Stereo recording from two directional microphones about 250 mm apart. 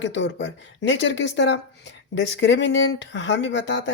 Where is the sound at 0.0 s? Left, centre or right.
Left.